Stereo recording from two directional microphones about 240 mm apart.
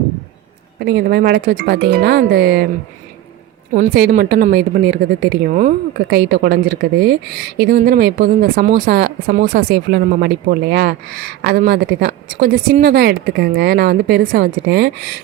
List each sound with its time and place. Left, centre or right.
0.8 s a woman's voice: right
3.7 s a woman's voice: right
6.1 s a woman's voice: right